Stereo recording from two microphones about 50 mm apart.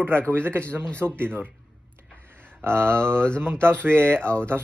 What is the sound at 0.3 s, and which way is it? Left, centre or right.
A man's voice, right.